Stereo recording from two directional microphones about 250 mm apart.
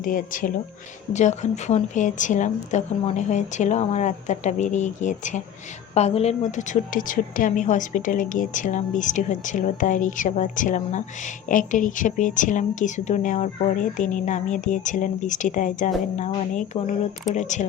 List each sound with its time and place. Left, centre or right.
0.0 s a woman's voice: left